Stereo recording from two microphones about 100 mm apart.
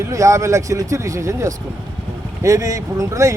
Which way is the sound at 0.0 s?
30° right (ahead or behind).